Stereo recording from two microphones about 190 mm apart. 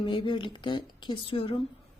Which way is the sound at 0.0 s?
25° left (ahead or behind).